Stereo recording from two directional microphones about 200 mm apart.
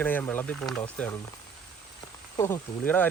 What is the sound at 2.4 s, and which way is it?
Speech, 10° left (ahead or behind).